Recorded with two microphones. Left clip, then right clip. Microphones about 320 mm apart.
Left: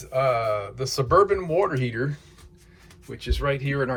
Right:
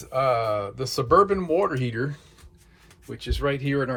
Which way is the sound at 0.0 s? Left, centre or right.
Centre.